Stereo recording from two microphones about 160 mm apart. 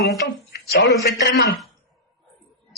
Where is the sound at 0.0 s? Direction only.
90° left.